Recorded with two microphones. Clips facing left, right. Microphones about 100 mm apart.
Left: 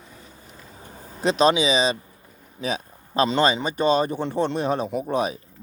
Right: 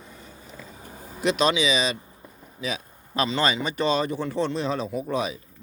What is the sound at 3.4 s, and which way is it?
Speech, 25° left (ahead or behind).